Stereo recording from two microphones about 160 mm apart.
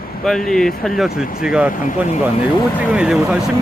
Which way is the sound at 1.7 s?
55° left (ahead or behind).